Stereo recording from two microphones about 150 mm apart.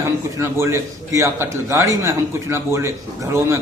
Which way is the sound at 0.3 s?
15° right (ahead or behind).